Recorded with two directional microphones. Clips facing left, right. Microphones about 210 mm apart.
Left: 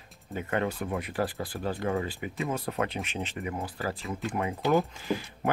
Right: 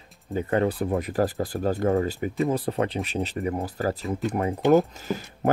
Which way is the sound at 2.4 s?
30° right (ahead or behind).